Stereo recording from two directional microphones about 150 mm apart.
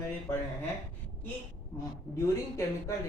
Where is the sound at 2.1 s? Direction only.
20° left (ahead or behind).